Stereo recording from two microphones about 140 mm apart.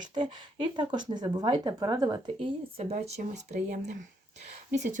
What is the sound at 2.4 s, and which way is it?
Speech, 50° right (ahead or behind).